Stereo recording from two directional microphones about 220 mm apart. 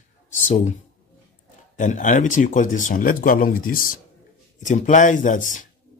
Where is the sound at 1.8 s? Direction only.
35° left (ahead or behind).